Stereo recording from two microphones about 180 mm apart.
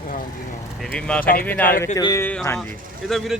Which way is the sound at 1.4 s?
10° left (ahead or behind).